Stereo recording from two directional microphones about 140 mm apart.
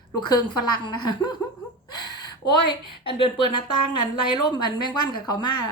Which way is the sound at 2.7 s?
35° left (ahead or behind).